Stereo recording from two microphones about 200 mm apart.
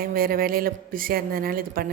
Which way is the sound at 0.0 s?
45° right (ahead or behind).